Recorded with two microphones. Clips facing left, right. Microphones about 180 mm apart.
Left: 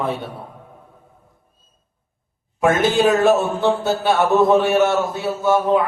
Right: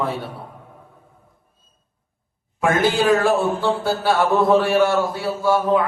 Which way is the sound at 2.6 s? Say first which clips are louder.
Left 2 dB; 20° left (ahead or behind).